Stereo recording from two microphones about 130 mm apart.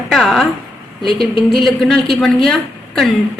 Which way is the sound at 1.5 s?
Centre (ahead or behind).